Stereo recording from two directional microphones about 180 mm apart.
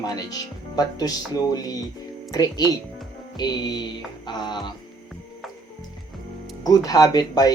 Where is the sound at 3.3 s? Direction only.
25° left (ahead or behind).